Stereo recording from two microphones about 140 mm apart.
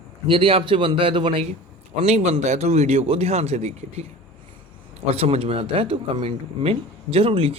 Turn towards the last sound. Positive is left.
turn(degrees=-40)  # may be behind; listen again after turning